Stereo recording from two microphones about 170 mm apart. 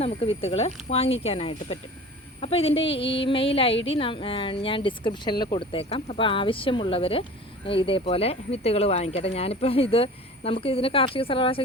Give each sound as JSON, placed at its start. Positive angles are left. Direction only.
{"t": 0.0, "sound": "speech", "side_deg": 35}